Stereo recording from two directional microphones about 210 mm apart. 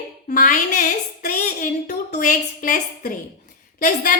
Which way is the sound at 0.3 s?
35° left (ahead or behind).